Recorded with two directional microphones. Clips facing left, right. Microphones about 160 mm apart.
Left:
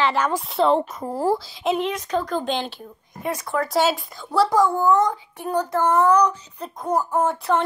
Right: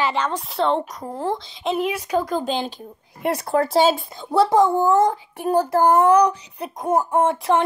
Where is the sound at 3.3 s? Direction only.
35° right (ahead or behind).